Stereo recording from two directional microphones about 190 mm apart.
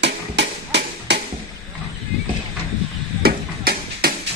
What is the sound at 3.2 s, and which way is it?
Music, 55° right (ahead or behind).